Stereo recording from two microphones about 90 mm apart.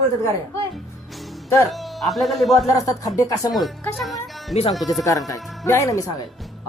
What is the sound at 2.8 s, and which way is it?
Speech, 40° left (ahead or behind).